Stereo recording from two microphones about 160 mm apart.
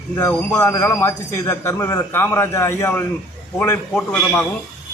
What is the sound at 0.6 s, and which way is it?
A man's voice, 20° left (ahead or behind).